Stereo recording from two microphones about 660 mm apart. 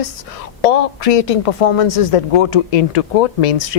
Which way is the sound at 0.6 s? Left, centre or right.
Left.